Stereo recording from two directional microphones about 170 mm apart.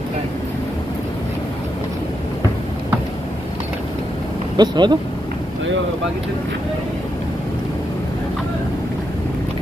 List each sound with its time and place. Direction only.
4.6 s speech: 25° right (ahead or behind)